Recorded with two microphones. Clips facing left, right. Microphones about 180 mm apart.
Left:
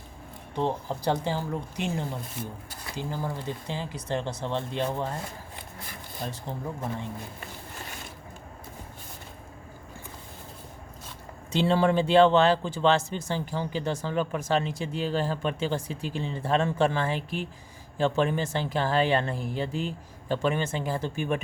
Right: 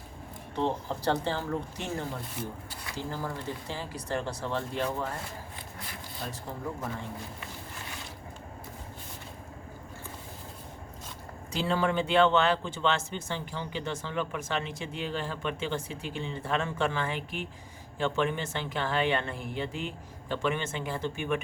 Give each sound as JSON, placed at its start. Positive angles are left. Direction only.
{"t": 0.5, "sound": "speech", "side_deg": 15}
{"t": 11.5, "sound": "speech", "side_deg": 30}